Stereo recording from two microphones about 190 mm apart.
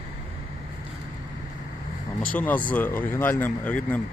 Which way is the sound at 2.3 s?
10° left (ahead or behind).